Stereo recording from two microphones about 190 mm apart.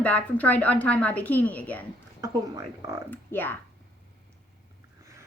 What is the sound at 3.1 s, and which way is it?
Speech, 10° left (ahead or behind).